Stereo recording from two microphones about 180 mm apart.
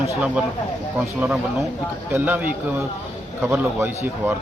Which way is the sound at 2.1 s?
10° right (ahead or behind).